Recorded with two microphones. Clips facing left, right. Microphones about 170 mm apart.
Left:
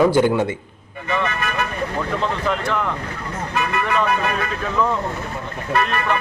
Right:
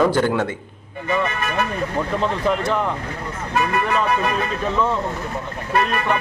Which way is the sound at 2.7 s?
35° right (ahead or behind).